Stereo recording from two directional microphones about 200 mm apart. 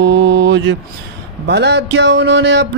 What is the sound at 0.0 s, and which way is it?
Mantra, 60° right (ahead or behind).